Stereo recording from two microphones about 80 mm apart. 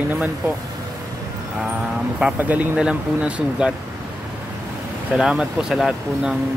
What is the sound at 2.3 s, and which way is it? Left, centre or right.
Speech, right.